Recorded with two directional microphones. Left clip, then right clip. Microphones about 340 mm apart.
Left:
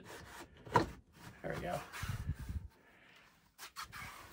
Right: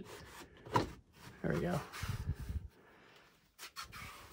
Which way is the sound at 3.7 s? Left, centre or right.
Centre.